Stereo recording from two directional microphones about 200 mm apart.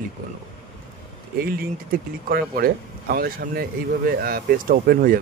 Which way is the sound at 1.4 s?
50° right (ahead or behind).